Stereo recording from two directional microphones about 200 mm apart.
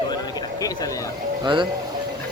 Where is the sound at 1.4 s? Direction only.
25° right (ahead or behind).